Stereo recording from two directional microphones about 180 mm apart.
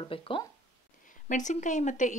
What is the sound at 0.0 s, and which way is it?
Speech, 30° left (ahead or behind).